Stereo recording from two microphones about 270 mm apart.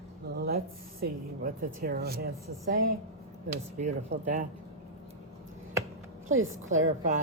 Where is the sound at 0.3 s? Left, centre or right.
Right.